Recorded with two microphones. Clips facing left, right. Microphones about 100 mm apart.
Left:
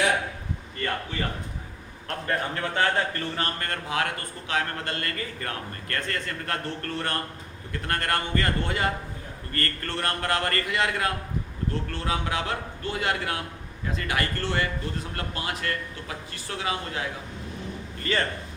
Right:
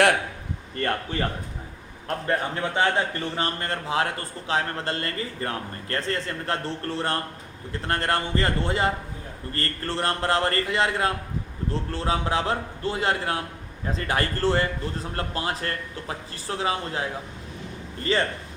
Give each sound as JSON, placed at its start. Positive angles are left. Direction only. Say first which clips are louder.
{"t": 2.2, "sound": "a man's voice", "louder": "right 2 dB", "side_deg": -20}